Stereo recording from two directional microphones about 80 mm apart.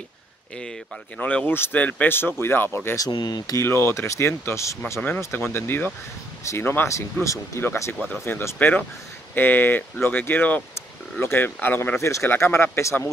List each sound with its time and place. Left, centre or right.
0.6 s speech: centre; by 3.0 s left
3.1 s speech: left
3.6 s speech: left
8.5 s speech: left